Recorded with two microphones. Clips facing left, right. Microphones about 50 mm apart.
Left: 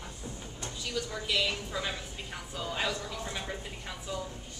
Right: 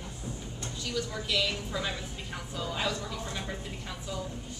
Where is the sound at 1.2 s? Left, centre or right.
Centre.